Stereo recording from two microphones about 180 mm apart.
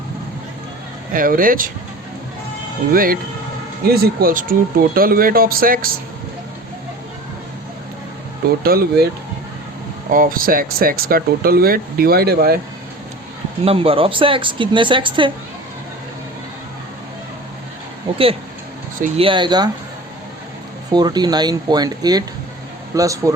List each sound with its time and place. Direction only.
1.1 s speech: 50° right (ahead or behind)
2.9 s speech: 50° right (ahead or behind)
8.6 s speech: 55° right (ahead or behind)
10.1 s speech: 50° right (ahead or behind)
13.7 s a woman's voice: 30° right (ahead or behind)
18.9 s speech: 45° right (ahead or behind)
19.2 s a woman's voice: 25° right (ahead or behind)
20.9 s a woman's voice: 25° right (ahead or behind)